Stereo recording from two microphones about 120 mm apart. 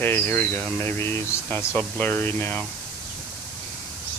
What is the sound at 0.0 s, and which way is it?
Speech, 15° left (ahead or behind).